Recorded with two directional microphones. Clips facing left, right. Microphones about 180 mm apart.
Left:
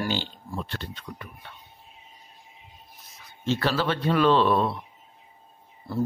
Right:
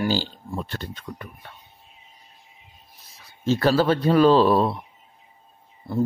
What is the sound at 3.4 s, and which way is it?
Speech, 40° right (ahead or behind).